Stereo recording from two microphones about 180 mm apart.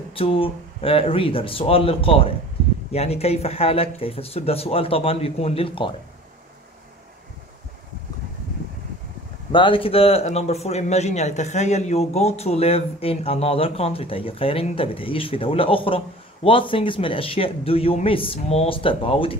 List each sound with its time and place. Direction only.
0.1 s a man's voice: 30° left (ahead or behind)
9.5 s a man's voice: 30° left (ahead or behind)